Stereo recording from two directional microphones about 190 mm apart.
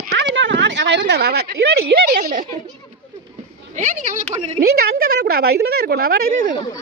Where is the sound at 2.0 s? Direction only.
50° right (ahead or behind).